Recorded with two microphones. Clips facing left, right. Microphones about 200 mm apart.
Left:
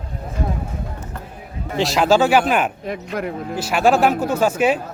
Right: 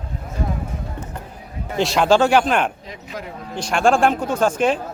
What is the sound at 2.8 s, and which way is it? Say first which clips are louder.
Speech: left 8 dB; 60° left (ahead or behind).